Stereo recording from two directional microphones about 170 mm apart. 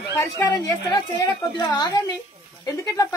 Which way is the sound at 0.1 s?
15° left (ahead or behind).